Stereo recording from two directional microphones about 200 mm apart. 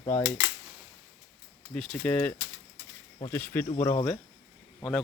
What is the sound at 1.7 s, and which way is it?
Speech, 5° left (ahead or behind).